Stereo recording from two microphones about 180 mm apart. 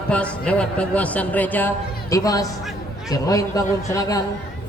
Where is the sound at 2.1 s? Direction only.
20° left (ahead or behind).